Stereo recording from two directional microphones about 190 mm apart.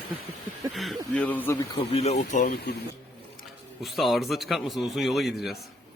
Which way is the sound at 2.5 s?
55° left (ahead or behind).